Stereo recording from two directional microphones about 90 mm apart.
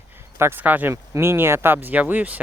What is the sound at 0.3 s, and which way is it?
Speech, 25° right (ahead or behind).